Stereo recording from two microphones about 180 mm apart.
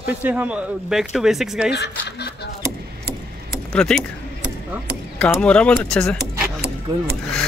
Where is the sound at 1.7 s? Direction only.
70° left (ahead or behind).